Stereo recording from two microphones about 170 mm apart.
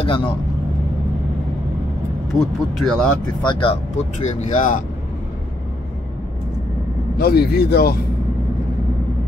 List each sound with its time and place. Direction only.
0.0 s speech: 30° left (ahead or behind)
2.3 s speech: centre (ahead or behind)
3.4 s speech: 30° left (ahead or behind); by 4.7 s 50° left (ahead or behind)
7.2 s speech: 65° left (ahead or behind)